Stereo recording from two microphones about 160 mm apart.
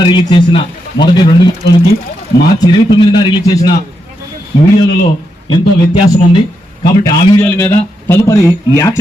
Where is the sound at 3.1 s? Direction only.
30° left (ahead or behind).